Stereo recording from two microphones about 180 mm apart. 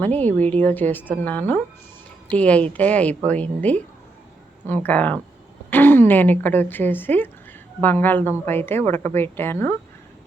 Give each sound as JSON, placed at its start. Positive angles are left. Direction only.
{"t": 0.0, "sound": "a woman's voice", "side_deg": 10}